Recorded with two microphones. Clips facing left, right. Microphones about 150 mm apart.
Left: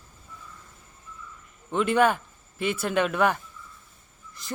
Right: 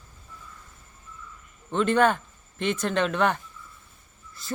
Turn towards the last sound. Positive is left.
turn(degrees=15)  # may be behind; listen again after turning